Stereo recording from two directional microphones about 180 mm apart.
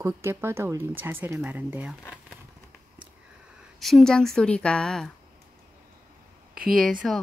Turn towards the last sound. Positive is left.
turn(degrees=5)  # may be behind; listen again after turning